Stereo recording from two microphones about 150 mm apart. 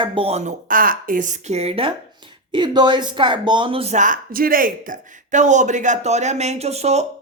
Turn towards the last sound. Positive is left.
turn(degrees=-45)  # may be behind; listen again after turning